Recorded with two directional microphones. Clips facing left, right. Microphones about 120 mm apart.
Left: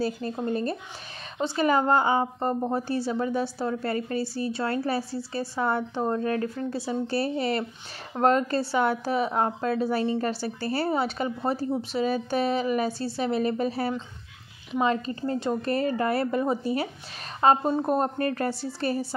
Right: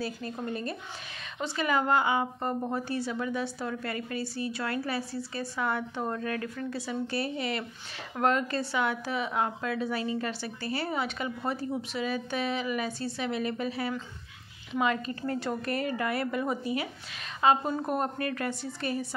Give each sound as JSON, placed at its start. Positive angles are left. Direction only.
{"t": 0.0, "sound": "a woman's voice", "side_deg": 30}